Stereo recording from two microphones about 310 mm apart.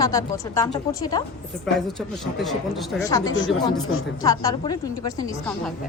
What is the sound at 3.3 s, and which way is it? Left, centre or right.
Speech, left.